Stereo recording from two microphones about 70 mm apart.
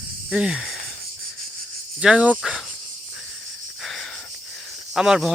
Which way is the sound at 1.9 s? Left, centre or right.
Centre.